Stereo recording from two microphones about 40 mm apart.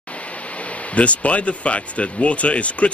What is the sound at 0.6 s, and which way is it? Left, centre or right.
Speech, left.